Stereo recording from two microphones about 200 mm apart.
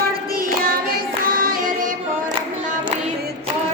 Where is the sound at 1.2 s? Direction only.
45° right (ahead or behind).